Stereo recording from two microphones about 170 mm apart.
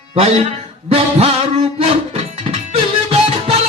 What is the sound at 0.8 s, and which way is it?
Speech, 35° right (ahead or behind).